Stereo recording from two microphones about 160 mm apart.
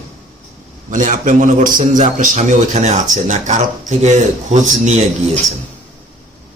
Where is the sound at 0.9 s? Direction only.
50° right (ahead or behind).